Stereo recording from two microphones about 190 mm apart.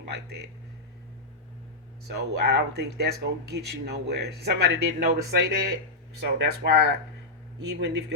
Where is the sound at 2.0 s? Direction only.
60° right (ahead or behind).